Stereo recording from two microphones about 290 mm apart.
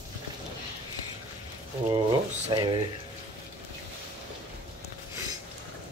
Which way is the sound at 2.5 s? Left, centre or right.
Centre.